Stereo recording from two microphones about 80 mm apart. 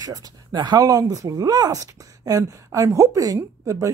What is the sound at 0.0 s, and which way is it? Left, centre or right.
Speech, right.